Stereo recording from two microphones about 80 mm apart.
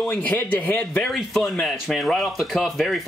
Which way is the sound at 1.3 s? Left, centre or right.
Centre.